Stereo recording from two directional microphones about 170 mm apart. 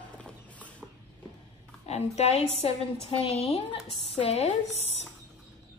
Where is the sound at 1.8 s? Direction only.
40° left (ahead or behind).